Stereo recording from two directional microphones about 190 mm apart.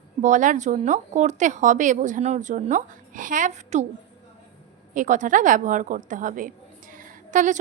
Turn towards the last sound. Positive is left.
turn(degrees=-40)  # may be behind; listen again after turning